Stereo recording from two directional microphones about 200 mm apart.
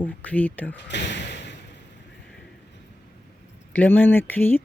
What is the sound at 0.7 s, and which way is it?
Speech, 60° left (ahead or behind).